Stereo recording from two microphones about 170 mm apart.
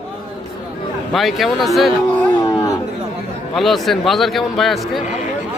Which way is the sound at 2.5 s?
20° left (ahead or behind).